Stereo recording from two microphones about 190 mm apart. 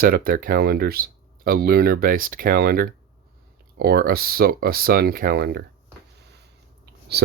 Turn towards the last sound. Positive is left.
turn(degrees=-60)  # may be behind; listen again after turning